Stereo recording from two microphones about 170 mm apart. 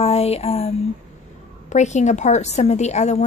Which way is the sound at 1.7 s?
45° left (ahead or behind).